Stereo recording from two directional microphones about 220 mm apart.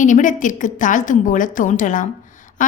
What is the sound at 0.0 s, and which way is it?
A woman's voice, 35° left (ahead or behind).